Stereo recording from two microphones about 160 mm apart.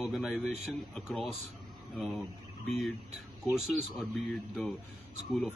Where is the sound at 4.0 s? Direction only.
Centre (ahead or behind).